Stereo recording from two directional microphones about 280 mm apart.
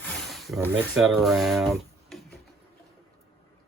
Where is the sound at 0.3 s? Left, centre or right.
Centre.